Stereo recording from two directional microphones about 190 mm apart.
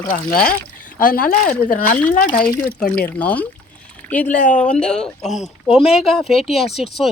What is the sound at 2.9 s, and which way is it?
Speech, 10° left (ahead or behind).